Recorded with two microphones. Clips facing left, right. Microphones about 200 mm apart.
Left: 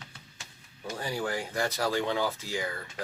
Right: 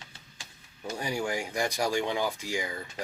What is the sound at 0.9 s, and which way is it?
Speech, 15° right (ahead or behind).